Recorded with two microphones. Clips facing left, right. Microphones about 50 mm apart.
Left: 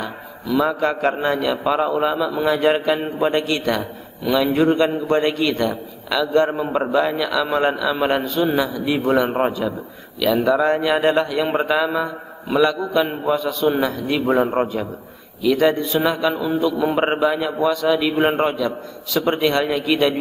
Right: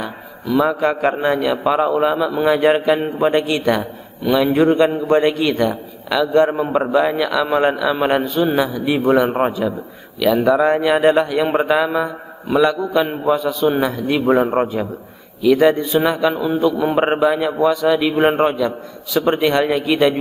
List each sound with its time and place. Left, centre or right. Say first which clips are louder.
0.0 s a man's voice: right 2 dB; centre
15.5 s a man's voice: right 4 dB; centre